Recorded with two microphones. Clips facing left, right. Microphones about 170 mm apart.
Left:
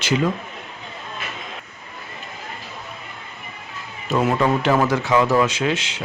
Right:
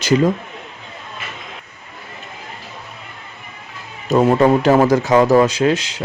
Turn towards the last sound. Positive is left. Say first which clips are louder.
# right 6 dB
turn(degrees=-40)  # may be behind; listen again after turning